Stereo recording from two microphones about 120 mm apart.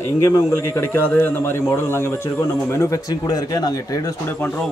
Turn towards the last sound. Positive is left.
turn(degrees=15)  # may be behind; listen again after turning